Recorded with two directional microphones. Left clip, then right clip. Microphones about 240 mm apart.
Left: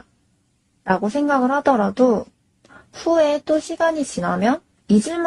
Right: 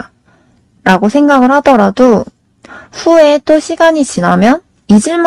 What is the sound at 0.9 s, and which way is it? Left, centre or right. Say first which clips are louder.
Speech: right 10 dB; right.